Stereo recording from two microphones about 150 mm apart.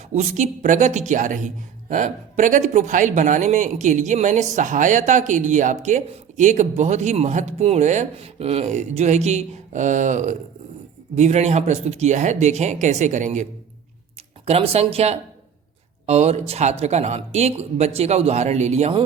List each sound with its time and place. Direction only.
0.1 s a woman's voice: 50° right (ahead or behind)
14.4 s a woman's voice: 40° right (ahead or behind)